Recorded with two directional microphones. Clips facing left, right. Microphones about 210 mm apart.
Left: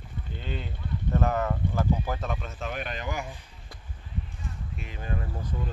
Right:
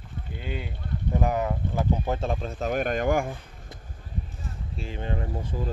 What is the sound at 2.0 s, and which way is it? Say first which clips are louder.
Speech: right 5 dB; 30° right (ahead or behind).